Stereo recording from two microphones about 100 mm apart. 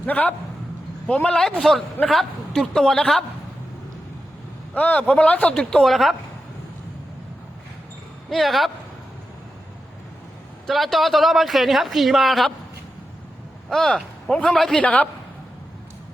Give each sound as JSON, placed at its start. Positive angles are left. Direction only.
{"t": 0.0, "sound": "speech", "side_deg": 15}
{"t": 4.7, "sound": "speech", "side_deg": 15}
{"t": 8.3, "sound": "speech", "side_deg": 0}
{"t": 10.7, "sound": "speech", "side_deg": 0}
{"t": 13.7, "sound": "speech", "side_deg": 5}
{"t": 14.8, "sound": "speech", "side_deg": 15}